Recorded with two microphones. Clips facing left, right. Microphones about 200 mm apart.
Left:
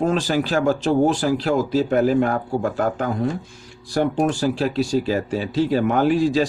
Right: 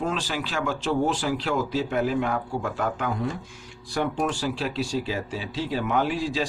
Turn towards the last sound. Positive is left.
turn(degrees=45)  # may be behind; listen again after turning